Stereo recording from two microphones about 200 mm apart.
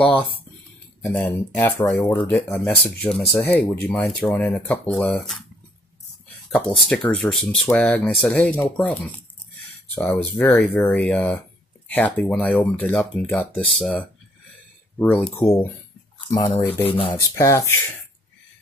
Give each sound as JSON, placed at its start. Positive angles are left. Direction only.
{"t": 0.0, "sound": "speech", "side_deg": 5}
{"t": 6.5, "sound": "speech", "side_deg": 5}
{"t": 16.4, "sound": "speech", "side_deg": 25}
{"t": 17.1, "sound": "speech", "side_deg": 15}